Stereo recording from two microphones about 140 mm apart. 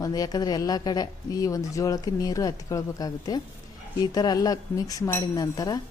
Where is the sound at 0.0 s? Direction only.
25° left (ahead or behind).